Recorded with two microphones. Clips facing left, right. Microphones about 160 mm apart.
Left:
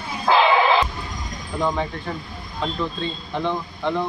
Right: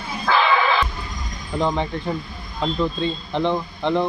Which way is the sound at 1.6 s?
20° right (ahead or behind).